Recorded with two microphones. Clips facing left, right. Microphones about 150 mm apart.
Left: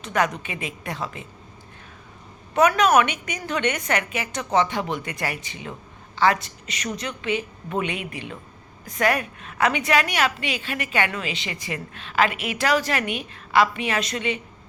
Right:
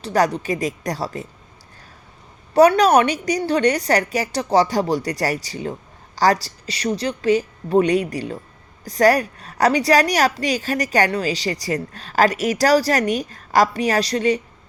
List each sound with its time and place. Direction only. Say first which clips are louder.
0.0 s a woman's voice: right 5 dB; 35° right (ahead or behind)
2.6 s a woman's voice: right 5 dB; 35° right (ahead or behind)